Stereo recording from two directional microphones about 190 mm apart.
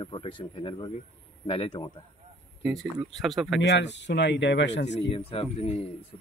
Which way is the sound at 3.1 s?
Centre (ahead or behind).